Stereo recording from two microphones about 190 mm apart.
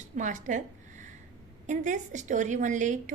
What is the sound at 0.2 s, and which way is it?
A woman's voice, 40° right (ahead or behind).